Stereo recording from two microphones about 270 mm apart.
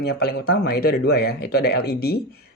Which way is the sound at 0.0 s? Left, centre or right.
Left.